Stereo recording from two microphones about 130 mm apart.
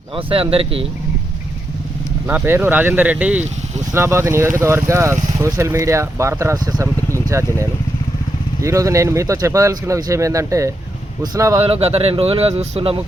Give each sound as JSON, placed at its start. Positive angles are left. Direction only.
{"t": 0.2, "sound": "speech", "side_deg": -45}
{"t": 2.2, "sound": "speech", "side_deg": -15}
{"t": 11.6, "sound": "speech", "side_deg": -55}